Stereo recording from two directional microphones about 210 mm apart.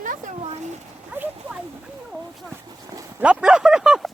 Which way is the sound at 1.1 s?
10° right (ahead or behind).